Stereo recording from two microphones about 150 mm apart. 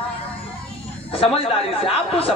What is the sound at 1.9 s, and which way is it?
Speech, 40° left (ahead or behind).